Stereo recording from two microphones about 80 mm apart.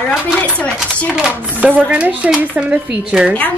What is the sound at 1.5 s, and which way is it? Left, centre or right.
Speech, right.